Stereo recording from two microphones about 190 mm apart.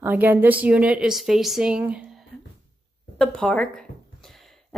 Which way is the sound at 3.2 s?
5° left (ahead or behind).